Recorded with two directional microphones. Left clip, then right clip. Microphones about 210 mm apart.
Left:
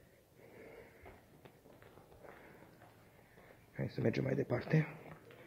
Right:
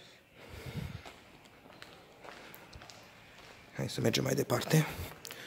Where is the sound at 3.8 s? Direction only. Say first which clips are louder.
Right 5 dB; 15° right (ahead or behind).